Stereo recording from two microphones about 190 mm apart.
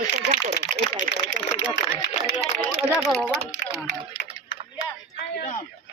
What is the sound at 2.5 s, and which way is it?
Speech, centre (ahead or behind).